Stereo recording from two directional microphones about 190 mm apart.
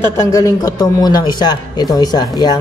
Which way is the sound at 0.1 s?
15° left (ahead or behind).